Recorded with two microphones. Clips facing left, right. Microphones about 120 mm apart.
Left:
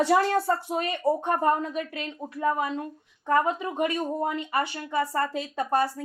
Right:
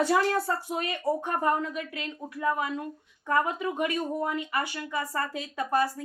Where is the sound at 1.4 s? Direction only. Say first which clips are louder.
Left 3 dB; 35° left (ahead or behind).